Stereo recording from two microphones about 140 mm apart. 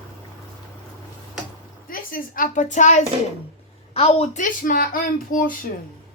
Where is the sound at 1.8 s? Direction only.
90° left; by 3.0 s 60° left (ahead or behind).